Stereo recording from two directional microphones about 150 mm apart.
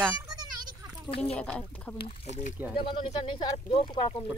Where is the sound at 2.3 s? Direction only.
55° left (ahead or behind).